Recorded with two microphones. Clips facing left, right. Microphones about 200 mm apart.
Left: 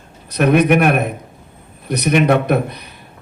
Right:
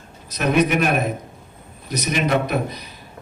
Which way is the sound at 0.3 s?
60° left (ahead or behind).